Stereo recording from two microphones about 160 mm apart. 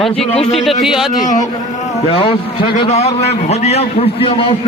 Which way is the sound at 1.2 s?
50° left (ahead or behind).